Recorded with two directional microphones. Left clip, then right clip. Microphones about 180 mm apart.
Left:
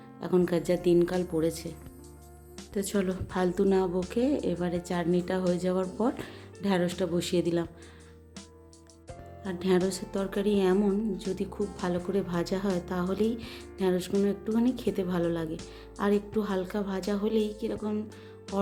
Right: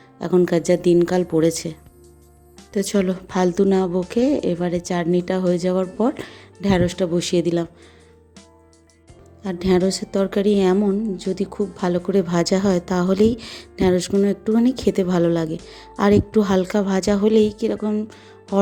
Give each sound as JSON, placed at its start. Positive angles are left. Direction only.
{"t": 0.2, "sound": "a woman's voice", "side_deg": -35}
{"t": 9.4, "sound": "a woman's voice", "side_deg": -35}